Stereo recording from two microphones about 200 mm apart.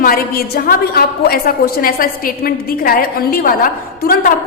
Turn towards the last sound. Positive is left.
turn(degrees=45)  # may be behind; listen again after turning